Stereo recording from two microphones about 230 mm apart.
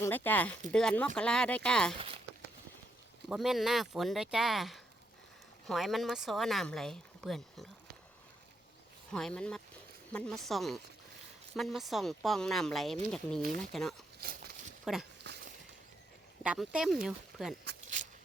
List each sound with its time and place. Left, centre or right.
0.0 s speech: centre
3.2 s speech: centre
9.1 s speech: centre
14.2 s speech: right
14.9 s speech: centre
15.3 s a sound: right
16.4 s speech: centre